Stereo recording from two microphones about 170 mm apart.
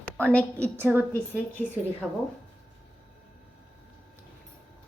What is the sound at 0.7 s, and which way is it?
A woman's voice, 10° right (ahead or behind).